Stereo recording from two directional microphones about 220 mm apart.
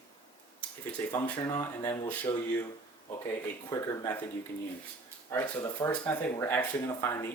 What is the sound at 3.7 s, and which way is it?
Speech, 15° left (ahead or behind).